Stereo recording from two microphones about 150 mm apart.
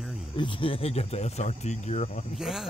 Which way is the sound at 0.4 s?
35° left (ahead or behind).